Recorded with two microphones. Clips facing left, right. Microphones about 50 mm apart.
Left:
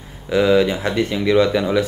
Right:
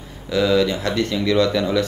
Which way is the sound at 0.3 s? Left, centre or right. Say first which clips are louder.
Left 3 dB; left.